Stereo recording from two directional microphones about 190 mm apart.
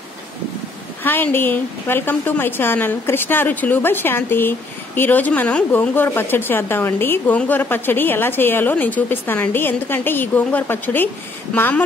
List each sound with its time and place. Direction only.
1.0 s a woman's voice: 10° left (ahead or behind)